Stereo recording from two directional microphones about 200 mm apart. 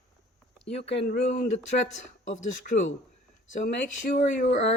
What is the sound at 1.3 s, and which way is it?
Speech, 35° left (ahead or behind).